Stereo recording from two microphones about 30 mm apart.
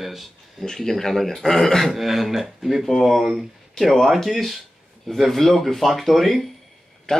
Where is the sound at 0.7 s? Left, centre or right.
Centre.